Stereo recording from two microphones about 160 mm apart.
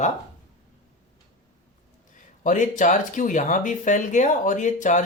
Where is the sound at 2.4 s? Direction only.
50° left (ahead or behind).